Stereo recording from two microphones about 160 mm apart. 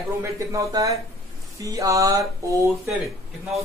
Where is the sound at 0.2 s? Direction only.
20° right (ahead or behind).